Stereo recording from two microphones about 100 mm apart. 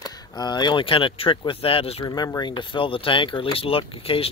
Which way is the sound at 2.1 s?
40° left (ahead or behind).